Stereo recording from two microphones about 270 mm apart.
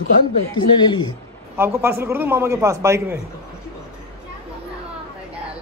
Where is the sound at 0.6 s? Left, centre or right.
Centre.